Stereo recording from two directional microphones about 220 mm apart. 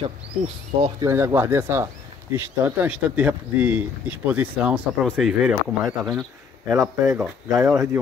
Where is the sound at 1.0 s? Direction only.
10° right (ahead or behind).